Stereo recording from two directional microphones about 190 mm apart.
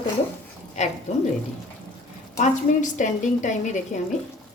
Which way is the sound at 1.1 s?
35° left (ahead or behind).